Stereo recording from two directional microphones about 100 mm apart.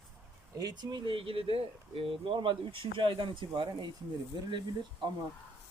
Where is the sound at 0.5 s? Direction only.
40° right (ahead or behind).